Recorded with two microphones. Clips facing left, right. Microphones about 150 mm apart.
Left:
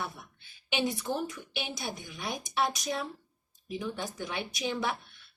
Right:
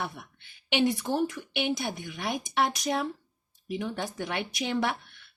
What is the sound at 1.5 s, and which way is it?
A woman's voice, 65° right (ahead or behind).